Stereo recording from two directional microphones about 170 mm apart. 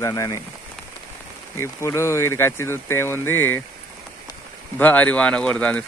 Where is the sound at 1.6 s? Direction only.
15° left (ahead or behind).